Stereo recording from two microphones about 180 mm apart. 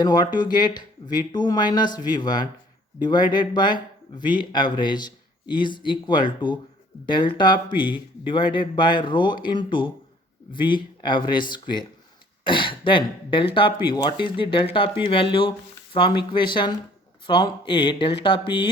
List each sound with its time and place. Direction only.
0.0 s a man's voice: 25° left (ahead or behind)